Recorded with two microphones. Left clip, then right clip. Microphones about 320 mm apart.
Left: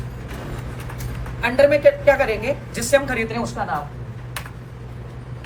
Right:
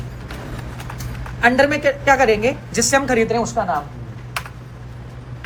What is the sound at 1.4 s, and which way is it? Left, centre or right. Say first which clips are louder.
A woman's voice: left 1 dB; right.